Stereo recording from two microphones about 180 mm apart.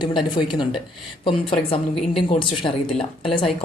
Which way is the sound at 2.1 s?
30° left (ahead or behind).